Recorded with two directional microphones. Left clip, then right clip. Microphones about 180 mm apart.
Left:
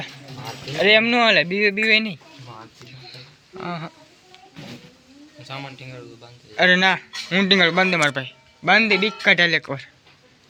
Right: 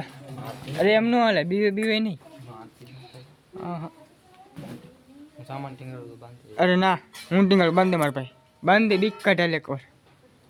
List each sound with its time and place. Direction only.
0.8 s speech: 20° right (ahead or behind)
3.6 s speech: 5° right (ahead or behind)
5.5 s speech: 50° right (ahead or behind)
6.6 s speech: 35° right (ahead or behind)
8.6 s speech: 40° right (ahead or behind)